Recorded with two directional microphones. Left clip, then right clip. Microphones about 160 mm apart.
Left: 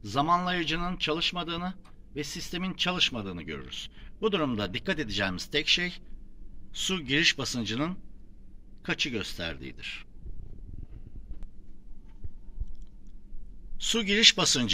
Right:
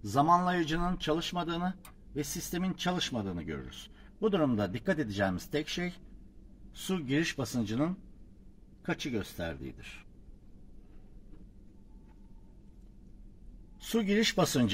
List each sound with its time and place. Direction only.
0.0 s a man's voice: 35° right (ahead or behind)
6.9 s a man's voice: 25° right (ahead or behind)
13.7 s a man's voice: 40° right (ahead or behind)